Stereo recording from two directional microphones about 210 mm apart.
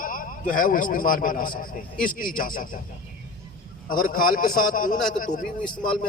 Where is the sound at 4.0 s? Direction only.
40° left (ahead or behind).